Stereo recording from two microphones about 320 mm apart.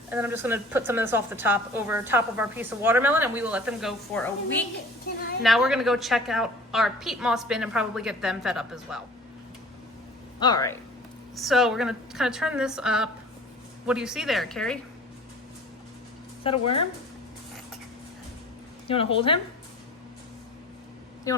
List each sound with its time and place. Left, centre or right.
0.1 s a woman's voice: centre
5.4 s a woman's voice: centre
10.4 s speech: centre
11.3 s a woman's voice: centre
16.4 s speech: centre
18.9 s speech: centre
21.3 s speech: centre